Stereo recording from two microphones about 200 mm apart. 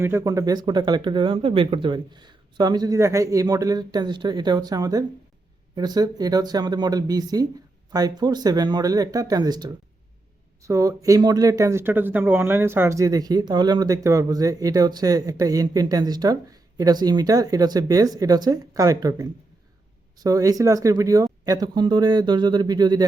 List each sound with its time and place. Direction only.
0.0 s speech: 15° right (ahead or behind)